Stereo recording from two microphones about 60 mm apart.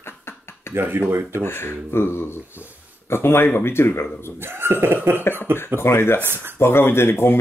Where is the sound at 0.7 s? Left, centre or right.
Right.